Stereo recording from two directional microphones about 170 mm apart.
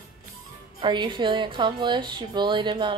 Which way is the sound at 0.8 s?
30° right (ahead or behind).